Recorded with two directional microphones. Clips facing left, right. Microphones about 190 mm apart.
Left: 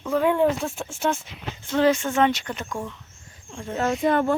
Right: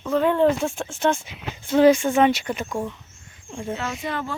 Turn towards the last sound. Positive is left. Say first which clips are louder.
# left 8 dB
turn(degrees=50)  # may be behind; listen again after turning